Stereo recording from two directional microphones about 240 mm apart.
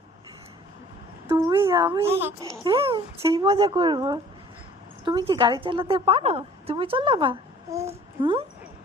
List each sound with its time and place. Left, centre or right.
1.3 s a woman's voice: centre
2.5 s a woman's voice: right